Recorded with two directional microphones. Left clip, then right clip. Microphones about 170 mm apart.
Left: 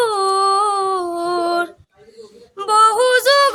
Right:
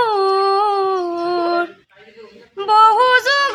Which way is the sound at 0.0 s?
30° left (ahead or behind).